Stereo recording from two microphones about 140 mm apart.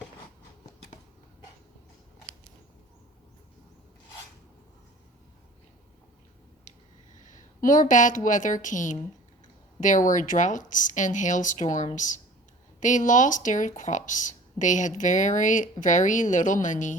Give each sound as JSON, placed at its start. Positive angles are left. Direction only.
{"t": 7.3, "sound": "a woman's voice", "side_deg": 70}